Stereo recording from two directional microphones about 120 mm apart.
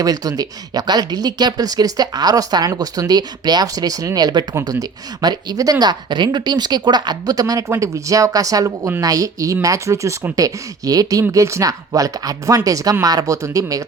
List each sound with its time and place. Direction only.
0.0 s speech: 30° right (ahead or behind)